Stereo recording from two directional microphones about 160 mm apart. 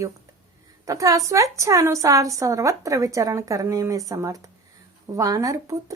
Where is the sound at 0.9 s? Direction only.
20° right (ahead or behind).